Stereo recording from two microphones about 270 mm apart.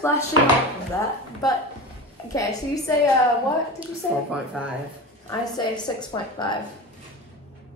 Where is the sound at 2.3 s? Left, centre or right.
Centre.